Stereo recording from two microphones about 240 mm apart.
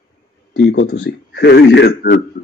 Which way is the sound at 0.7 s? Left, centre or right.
Left.